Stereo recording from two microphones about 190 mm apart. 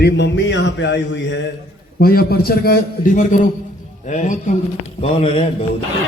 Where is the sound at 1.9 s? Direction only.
55° left (ahead or behind); by 5.4 s 30° left (ahead or behind).